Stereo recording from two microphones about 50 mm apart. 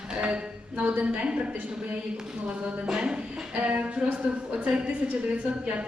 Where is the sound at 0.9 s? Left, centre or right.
Right.